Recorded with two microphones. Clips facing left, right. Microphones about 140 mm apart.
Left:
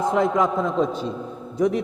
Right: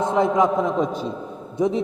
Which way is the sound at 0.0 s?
20° right (ahead or behind).